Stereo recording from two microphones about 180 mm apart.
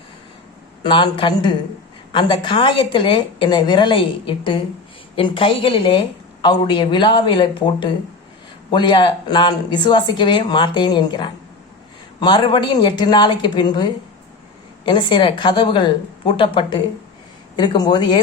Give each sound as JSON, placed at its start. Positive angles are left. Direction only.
{"t": 0.8, "sound": "a woman's voice", "side_deg": 25}